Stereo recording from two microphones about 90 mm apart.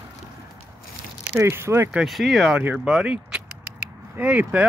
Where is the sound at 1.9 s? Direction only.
10° right (ahead or behind).